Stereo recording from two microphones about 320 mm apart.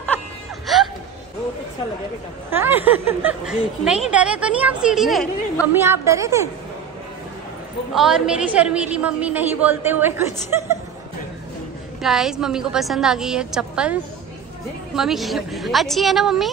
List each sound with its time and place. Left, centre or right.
0.7 s gasp: centre
2.5 s a woman's voice: centre
7.9 s a woman's voice: centre
12.0 s a woman's voice: centre
15.0 s a woman's voice: centre